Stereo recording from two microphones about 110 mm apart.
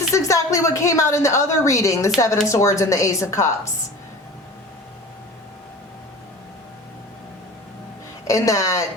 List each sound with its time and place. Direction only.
0.1 s a woman's voice: 30° left (ahead or behind)
8.3 s a woman's voice: 30° left (ahead or behind)